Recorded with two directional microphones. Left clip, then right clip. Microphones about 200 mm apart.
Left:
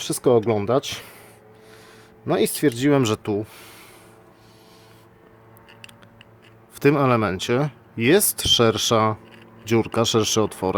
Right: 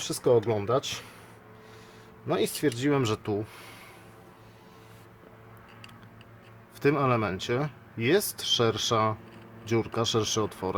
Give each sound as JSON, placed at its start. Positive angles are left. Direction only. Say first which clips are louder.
{"t": 0.0, "sound": "speech", "louder": "left 5 dB", "side_deg": 40}
{"t": 2.2, "sound": "speech", "louder": "left 7 dB", "side_deg": 45}
{"t": 6.7, "sound": "speech", "louder": "left 7 dB", "side_deg": 35}